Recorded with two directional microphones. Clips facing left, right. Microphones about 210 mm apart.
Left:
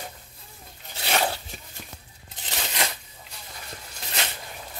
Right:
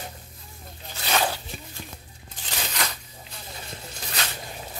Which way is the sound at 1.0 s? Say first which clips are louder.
Even; 25° left (ahead or behind).